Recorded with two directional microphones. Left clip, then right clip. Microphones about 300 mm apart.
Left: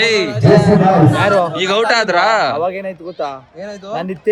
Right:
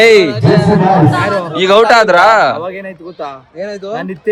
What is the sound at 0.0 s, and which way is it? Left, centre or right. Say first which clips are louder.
Speech: right 8 dB; centre.